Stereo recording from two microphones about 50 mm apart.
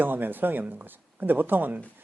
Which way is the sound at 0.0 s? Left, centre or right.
Right.